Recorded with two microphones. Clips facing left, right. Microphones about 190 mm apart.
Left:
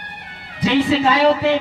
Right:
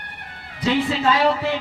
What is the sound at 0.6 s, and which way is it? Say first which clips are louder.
Speech: left 4 dB; 75° left (ahead or behind).